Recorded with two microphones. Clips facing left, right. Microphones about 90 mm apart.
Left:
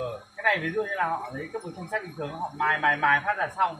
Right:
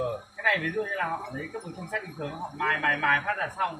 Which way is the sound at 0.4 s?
30° left (ahead or behind).